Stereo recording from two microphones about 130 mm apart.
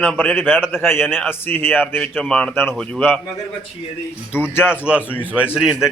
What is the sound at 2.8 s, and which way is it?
Speech, 5° left (ahead or behind).